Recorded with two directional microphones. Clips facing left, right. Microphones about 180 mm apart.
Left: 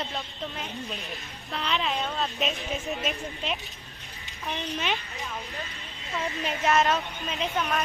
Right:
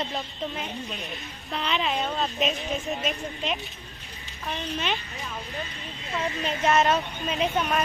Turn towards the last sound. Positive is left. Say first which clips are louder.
# right 3 dB
turn(degrees=-10)  # may be behind; listen again after turning